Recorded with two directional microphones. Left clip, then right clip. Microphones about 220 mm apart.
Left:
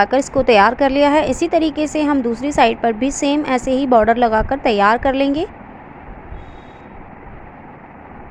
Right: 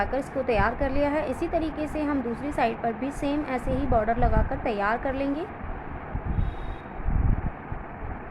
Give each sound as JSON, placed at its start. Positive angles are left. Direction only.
{"t": 0.0, "sound": "a woman's voice", "side_deg": 40}